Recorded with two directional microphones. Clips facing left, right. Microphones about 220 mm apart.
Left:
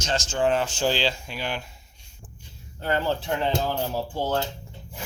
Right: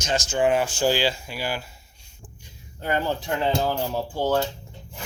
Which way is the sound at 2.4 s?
15° right (ahead or behind).